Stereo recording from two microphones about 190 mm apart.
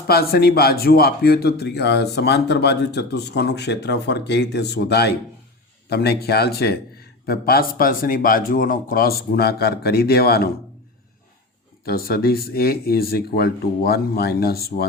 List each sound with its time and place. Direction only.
0.1 s a man's voice: 55° left (ahead or behind)
11.9 s speech: 55° left (ahead or behind)